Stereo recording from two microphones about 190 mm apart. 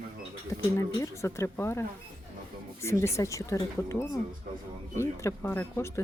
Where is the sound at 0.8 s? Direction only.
15° left (ahead or behind).